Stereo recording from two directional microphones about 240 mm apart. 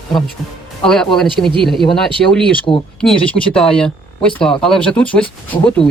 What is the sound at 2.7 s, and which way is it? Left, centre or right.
Speech, centre.